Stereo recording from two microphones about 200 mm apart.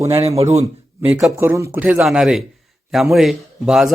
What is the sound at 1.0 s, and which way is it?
A man's voice, 10° right (ahead or behind).